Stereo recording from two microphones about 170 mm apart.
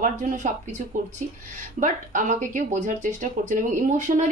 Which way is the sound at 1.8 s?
50° right (ahead or behind).